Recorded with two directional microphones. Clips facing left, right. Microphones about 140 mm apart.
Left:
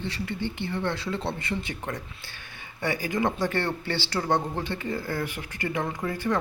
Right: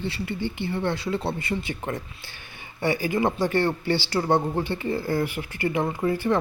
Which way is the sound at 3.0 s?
10° right (ahead or behind).